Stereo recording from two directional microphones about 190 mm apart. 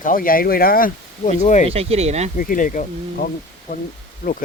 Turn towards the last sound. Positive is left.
turn(degrees=50)  # may be behind; listen again after turning